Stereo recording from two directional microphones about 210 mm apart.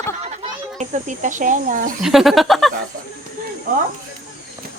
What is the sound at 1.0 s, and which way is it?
Speech, 35° right (ahead or behind).